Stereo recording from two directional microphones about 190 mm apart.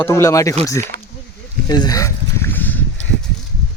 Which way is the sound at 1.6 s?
20° left (ahead or behind).